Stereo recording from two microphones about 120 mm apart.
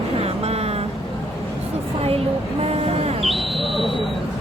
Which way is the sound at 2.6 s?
60° right (ahead or behind).